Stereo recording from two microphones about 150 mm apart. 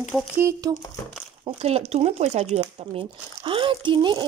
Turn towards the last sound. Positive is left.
turn(degrees=-30)  # may be behind; listen again after turning